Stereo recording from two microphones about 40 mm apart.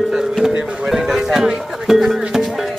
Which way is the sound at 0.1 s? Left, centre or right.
Centre.